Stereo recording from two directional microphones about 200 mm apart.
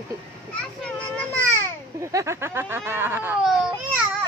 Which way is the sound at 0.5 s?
5° left (ahead or behind).